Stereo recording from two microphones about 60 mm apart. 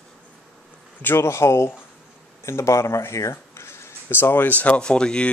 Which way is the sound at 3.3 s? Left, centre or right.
Left.